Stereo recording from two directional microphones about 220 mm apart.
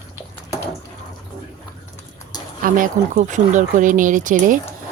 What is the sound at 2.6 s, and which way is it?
Speech, 35° right (ahead or behind).